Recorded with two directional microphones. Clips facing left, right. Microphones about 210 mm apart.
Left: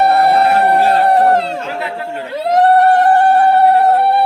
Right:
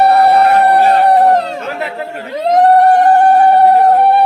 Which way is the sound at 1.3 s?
10° left (ahead or behind).